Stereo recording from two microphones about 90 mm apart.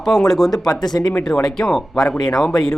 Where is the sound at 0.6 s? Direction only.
45° left (ahead or behind).